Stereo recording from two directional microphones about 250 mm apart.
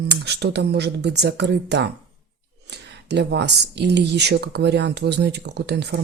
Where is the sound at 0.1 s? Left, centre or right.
Right.